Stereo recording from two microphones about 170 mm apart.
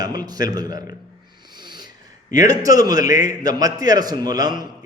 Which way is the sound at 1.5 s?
25° right (ahead or behind).